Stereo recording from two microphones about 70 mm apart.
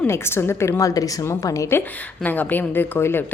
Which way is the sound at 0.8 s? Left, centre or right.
Left.